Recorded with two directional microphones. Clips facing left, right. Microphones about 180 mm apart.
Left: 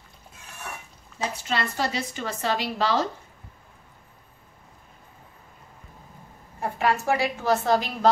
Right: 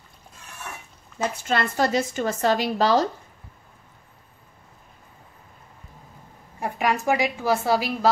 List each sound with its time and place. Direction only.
1.5 s a woman's voice: 45° right (ahead or behind)
6.6 s a woman's voice: 15° right (ahead or behind)